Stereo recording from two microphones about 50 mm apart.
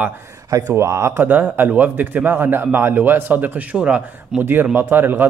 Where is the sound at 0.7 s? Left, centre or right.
Right.